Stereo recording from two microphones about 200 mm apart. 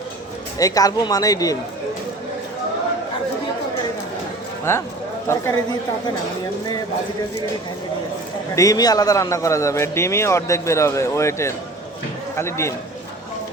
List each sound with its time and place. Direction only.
0.6 s a man's voice: 20° left (ahead or behind)
4.7 s a man's voice: 15° left (ahead or behind)
8.5 s a man's voice: 15° left (ahead or behind)